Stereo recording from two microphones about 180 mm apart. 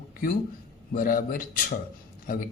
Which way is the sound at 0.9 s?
50° left (ahead or behind).